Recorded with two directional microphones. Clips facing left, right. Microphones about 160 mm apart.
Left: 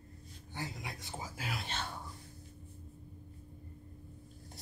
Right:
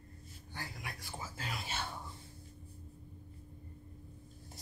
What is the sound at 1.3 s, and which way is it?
Whispering, 5° left (ahead or behind).